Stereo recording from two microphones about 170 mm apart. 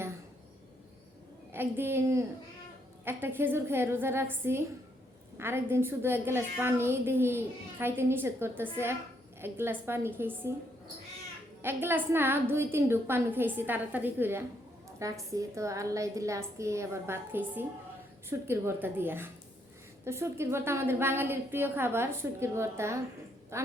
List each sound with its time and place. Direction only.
1.5 s a woman's voice: 15° right (ahead or behind)
11.6 s a woman's voice: 15° right (ahead or behind)